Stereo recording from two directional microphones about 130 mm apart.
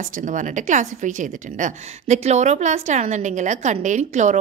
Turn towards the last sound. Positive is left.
turn(degrees=-70)  # may be behind; listen again after turning